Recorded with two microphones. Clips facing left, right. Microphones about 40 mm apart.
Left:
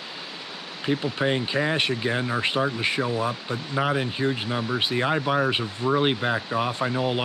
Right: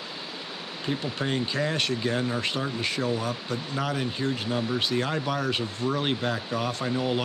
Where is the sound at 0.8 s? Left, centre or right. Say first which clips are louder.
Left 5 dB; centre.